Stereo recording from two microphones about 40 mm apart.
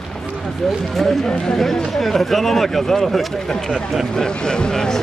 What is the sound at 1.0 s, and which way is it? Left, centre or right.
Speech, centre.